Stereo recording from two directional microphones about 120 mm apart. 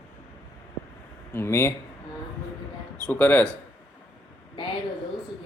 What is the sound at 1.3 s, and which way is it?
Speech, 20° left (ahead or behind).